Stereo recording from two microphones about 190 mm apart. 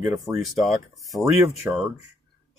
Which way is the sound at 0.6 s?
Centre (ahead or behind).